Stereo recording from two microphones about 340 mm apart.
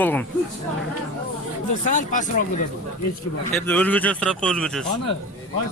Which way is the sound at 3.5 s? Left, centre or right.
Centre.